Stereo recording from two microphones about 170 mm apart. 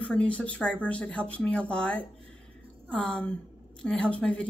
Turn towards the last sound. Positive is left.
turn(degrees=5)  # may be behind; listen again after turning